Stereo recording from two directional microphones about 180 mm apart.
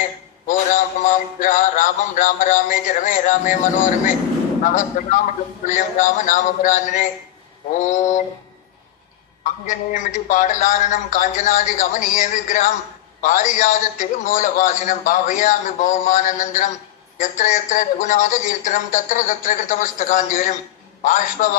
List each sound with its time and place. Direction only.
0.5 s a man's voice: 45° left (ahead or behind)
4.6 s a man's voice: 45° left (ahead or behind)
9.4 s a man's voice: 45° left (ahead or behind)